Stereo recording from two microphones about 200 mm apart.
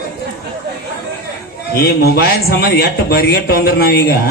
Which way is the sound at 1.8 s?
50° left (ahead or behind).